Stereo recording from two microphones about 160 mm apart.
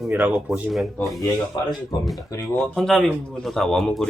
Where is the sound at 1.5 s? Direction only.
25° left (ahead or behind).